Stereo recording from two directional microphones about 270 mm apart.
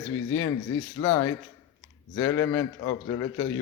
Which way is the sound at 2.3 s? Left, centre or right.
Centre.